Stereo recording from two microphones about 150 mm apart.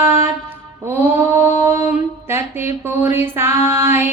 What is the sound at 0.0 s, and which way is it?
Music, 20° right (ahead or behind).